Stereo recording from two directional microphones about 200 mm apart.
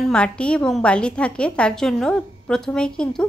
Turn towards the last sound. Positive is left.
turn(degrees=5)  # may be behind; listen again after turning